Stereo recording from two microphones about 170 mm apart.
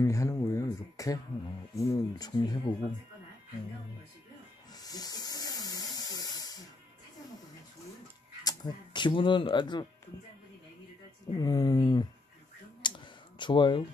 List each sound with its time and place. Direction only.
0.0 s speech: 15° left (ahead or behind)
4.7 s a sound: 20° left (ahead or behind)
8.5 s speech: 25° left (ahead or behind)
11.3 s speech: 25° left (ahead or behind)
12.8 s clicking: 30° left (ahead or behind)